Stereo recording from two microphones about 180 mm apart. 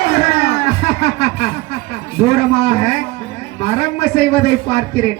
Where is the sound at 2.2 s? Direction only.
35° left (ahead or behind).